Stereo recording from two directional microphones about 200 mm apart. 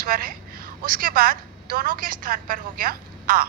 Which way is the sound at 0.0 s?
45° right (ahead or behind).